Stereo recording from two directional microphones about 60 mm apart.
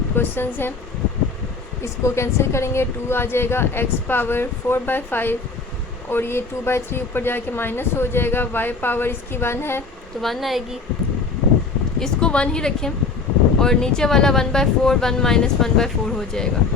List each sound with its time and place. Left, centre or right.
0.2 s speech: left
1.8 s speech: left
10.2 s a woman's voice: centre
11.9 s speech: centre